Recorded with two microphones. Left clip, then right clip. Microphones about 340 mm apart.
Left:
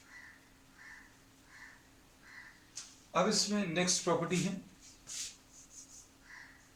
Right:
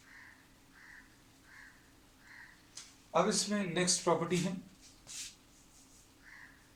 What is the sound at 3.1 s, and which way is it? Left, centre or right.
Speech, centre.